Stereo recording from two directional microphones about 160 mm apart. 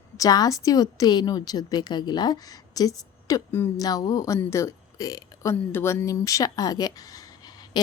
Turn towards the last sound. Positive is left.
turn(degrees=25)  # may be behind; listen again after turning